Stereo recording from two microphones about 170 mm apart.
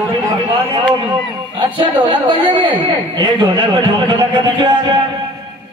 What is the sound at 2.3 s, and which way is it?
Speech, 10° left (ahead or behind).